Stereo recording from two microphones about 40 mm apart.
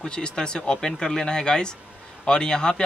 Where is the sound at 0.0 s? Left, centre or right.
Left.